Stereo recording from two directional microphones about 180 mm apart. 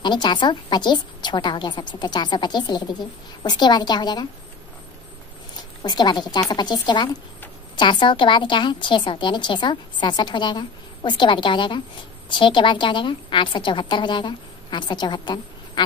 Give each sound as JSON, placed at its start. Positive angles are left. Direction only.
{"t": 0.0, "sound": "a woman's voice", "side_deg": 25}
{"t": 5.6, "sound": "a woman's voice", "side_deg": 20}